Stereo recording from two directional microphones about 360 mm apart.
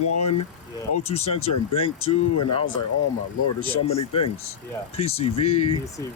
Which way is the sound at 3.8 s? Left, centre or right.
Centre.